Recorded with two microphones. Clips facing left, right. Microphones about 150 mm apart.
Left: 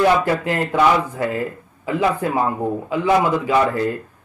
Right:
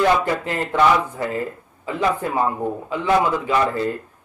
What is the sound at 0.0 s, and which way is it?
A man's voice, 10° left (ahead or behind).